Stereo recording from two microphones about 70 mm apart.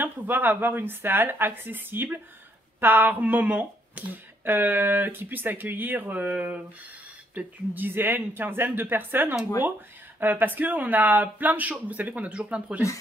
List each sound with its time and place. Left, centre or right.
0.0 s speech: right